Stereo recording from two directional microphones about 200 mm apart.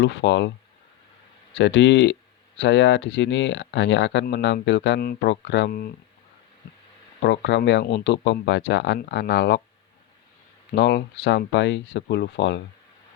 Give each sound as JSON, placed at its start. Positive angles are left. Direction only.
{"t": 0.0, "sound": "speech", "side_deg": 65}
{"t": 1.5, "sound": "speech", "side_deg": 65}
{"t": 7.2, "sound": "speech", "side_deg": 60}
{"t": 10.7, "sound": "speech", "side_deg": 55}